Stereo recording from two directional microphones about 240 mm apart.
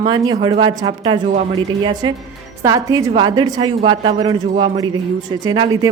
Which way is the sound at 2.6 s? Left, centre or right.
Centre.